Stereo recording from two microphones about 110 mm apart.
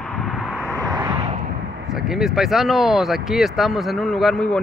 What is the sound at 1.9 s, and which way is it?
Speech, 5° right (ahead or behind).